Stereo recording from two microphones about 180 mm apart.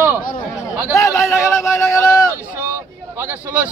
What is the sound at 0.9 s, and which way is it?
A man's voice, 15° left (ahead or behind).